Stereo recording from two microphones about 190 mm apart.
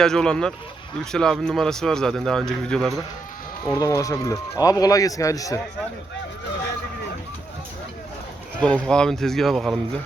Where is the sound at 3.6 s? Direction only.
15° left (ahead or behind).